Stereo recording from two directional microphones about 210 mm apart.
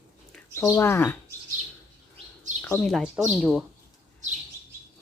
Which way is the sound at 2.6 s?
5° left (ahead or behind).